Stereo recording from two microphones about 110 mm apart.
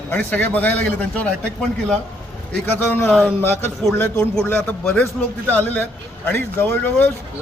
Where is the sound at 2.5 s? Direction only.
15° left (ahead or behind).